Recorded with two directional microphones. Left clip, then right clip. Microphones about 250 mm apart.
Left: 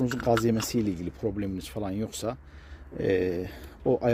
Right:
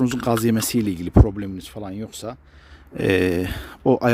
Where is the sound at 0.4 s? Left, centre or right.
Right.